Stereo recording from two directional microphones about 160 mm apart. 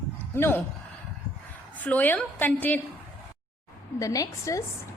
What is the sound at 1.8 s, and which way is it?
Speech, 10° left (ahead or behind).